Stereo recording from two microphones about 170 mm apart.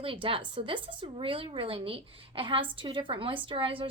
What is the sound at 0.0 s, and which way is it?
A woman's voice, 30° right (ahead or behind).